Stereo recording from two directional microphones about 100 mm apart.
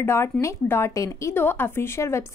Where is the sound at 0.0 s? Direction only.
25° left (ahead or behind).